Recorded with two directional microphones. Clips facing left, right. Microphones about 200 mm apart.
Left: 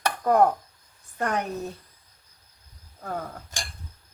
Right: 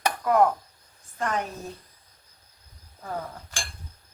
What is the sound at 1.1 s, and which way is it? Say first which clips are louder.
Speech: left 1 dB; 60° left (ahead or behind).